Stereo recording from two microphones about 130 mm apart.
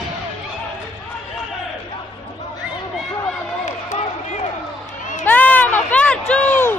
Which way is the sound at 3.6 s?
65° left (ahead or behind).